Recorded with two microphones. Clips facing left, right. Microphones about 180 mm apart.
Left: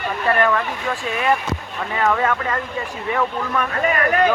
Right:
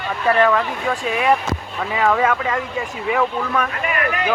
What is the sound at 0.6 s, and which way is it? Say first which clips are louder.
Speech: right 2 dB; 10° right (ahead or behind).